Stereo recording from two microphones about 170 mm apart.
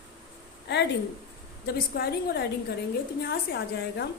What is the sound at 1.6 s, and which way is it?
A woman's voice, 65° left (ahead or behind).